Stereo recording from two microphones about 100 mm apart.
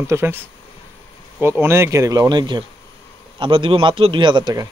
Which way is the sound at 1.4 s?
25° right (ahead or behind).